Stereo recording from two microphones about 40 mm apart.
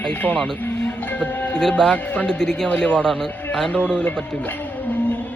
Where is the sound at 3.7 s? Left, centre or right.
Left.